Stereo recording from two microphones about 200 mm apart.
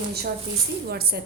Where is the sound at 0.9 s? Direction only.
50° right (ahead or behind).